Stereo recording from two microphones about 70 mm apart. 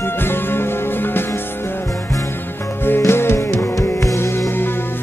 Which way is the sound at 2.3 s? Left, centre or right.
Left.